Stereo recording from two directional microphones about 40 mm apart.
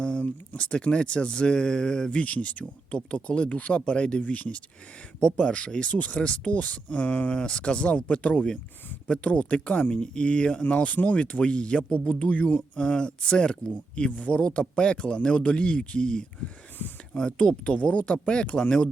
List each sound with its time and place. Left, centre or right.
0.0 s speech: left
2.1 s speech: left
12.7 s speech: left